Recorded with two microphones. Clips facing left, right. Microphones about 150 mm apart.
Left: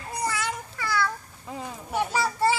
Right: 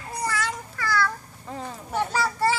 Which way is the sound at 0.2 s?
20° left (ahead or behind).